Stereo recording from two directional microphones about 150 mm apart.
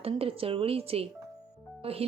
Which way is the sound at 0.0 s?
40° right (ahead or behind).